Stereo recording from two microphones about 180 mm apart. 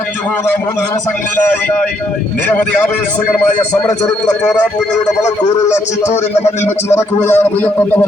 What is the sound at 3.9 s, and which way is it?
Speech, 5° left (ahead or behind).